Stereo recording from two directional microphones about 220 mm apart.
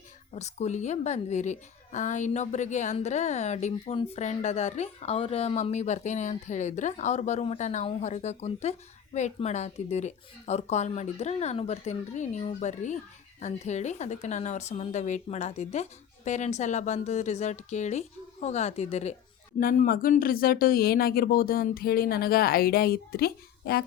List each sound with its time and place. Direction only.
0.3 s a woman's voice: 30° left (ahead or behind)